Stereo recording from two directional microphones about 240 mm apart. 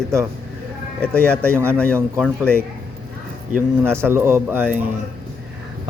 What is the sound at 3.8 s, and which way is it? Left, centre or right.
A man's voice, centre.